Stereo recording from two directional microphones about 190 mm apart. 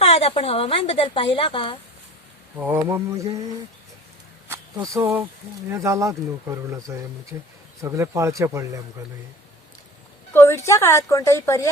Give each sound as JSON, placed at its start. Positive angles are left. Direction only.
{"t": 0.0, "sound": "speech", "side_deg": 35}
{"t": 2.6, "sound": "speech", "side_deg": -10}
{"t": 4.4, "sound": "a sound", "side_deg": -15}
{"t": 5.7, "sound": "speech", "side_deg": -15}
{"t": 10.3, "sound": "a woman's voice", "side_deg": 15}